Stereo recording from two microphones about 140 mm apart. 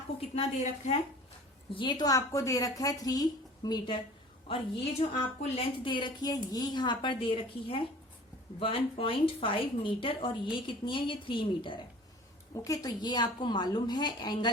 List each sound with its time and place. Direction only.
0.2 s a woman's voice: 45° left (ahead or behind)
1.7 s a woman's voice: 35° left (ahead or behind)
4.5 s a woman's voice: 40° left (ahead or behind)